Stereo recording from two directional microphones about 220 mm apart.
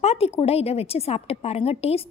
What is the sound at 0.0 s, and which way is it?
A woman's voice, 30° left (ahead or behind).